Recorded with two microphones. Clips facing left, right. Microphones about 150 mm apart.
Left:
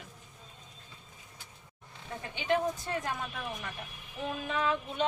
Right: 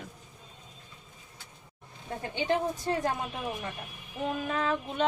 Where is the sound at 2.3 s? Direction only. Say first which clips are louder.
Right 1 dB; 35° right (ahead or behind).